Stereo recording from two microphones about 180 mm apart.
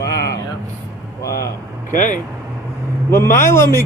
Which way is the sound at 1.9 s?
45° left (ahead or behind).